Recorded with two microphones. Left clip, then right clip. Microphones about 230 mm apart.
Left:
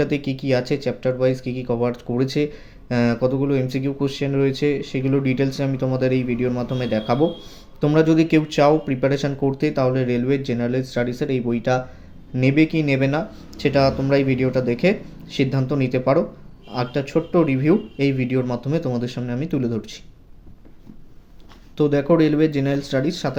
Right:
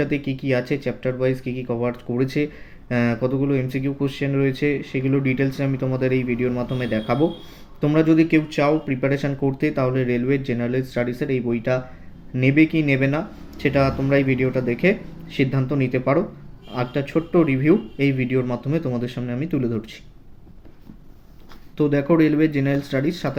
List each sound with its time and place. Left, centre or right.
0.1 s speech: centre
21.8 s speech: centre